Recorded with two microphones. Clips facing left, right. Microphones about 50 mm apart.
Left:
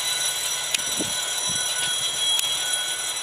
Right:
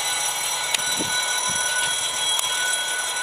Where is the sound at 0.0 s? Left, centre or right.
Right.